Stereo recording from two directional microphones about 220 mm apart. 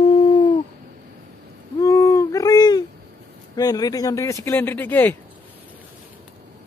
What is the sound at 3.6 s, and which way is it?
Speech, 15° left (ahead or behind).